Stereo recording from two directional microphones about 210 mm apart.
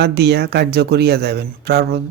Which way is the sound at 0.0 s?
50° right (ahead or behind).